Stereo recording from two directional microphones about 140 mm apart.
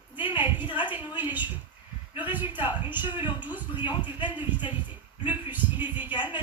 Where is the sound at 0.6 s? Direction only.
35° left (ahead or behind).